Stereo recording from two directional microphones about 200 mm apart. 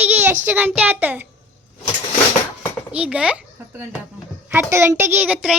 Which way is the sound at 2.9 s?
5° right (ahead or behind).